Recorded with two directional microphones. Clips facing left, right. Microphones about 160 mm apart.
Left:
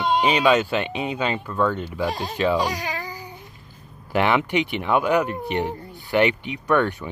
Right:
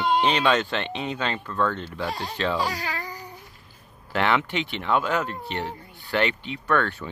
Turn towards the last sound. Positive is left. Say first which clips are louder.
# left 4 dB
turn(degrees=15)  # may be behind; listen again after turning